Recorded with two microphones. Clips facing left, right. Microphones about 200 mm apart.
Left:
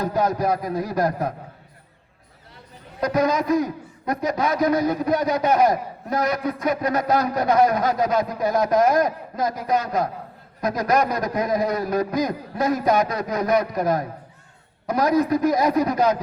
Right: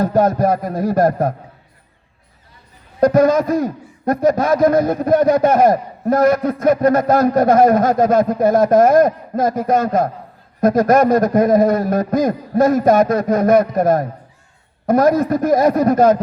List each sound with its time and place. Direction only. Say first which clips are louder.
0.0 s a man's voice: right 7 dB; 50° right (ahead or behind)
3.0 s a man's voice: right 9 dB; 50° right (ahead or behind)